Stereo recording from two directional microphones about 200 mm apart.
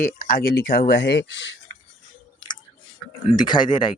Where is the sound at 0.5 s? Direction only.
50° left (ahead or behind).